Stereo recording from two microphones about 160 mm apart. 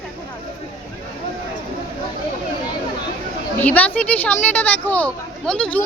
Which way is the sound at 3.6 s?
10° left (ahead or behind).